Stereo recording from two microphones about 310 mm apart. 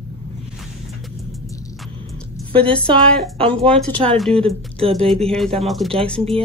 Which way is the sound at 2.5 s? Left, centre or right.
Centre.